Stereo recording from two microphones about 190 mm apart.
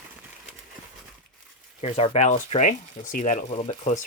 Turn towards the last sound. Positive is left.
turn(degrees=35)  # may be behind; listen again after turning